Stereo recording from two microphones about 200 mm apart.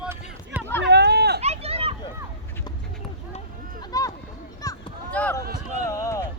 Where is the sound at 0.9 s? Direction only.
55° right (ahead or behind).